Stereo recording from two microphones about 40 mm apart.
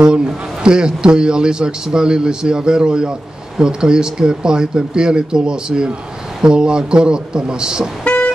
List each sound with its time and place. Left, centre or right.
0.0 s a man's voice: right
8.0 s vehicle: left